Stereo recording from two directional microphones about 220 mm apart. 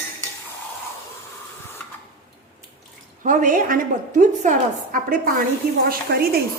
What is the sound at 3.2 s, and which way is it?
A woman's voice, 35° right (ahead or behind).